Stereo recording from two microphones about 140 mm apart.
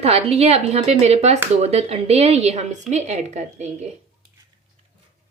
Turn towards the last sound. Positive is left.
turn(degrees=-55)  # may be behind; listen again after turning